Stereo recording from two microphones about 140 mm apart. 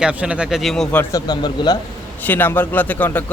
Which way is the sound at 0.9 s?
15° left (ahead or behind).